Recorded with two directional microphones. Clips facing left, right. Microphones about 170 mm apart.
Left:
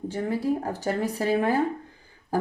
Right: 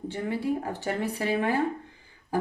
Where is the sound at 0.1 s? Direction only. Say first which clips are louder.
Left 3 dB; 40° left (ahead or behind).